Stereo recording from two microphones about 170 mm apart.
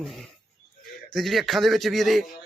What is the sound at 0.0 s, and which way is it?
Speech, 5° left (ahead or behind).